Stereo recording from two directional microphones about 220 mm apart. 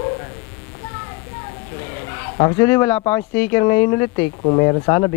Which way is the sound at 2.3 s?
20° left (ahead or behind).